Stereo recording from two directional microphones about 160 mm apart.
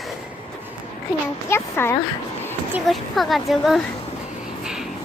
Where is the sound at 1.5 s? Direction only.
15° left (ahead or behind).